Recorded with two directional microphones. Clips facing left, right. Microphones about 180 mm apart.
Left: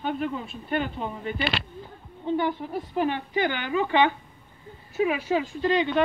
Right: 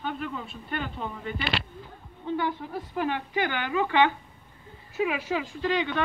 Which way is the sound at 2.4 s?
25° left (ahead or behind).